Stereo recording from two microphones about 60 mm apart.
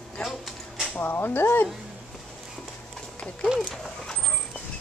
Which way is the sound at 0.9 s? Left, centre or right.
Left.